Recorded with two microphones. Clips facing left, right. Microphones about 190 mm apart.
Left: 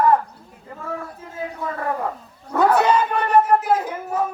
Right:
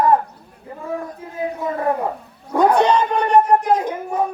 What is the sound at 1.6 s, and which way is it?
Speech, 20° right (ahead or behind).